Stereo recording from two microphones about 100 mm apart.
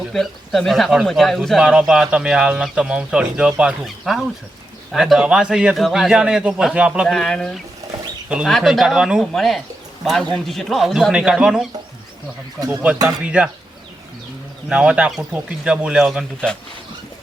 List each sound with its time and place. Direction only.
0.1 s a man's voice: 5° left (ahead or behind)
7.1 s a man's voice: 5° left (ahead or behind)
12.5 s speech: 35° right (ahead or behind)
13.2 s a man's voice: 10° right (ahead or behind)
14.7 s a man's voice: 10° right (ahead or behind)